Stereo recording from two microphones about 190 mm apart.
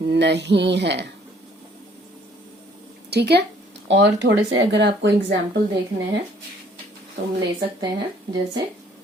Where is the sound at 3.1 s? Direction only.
60° right (ahead or behind).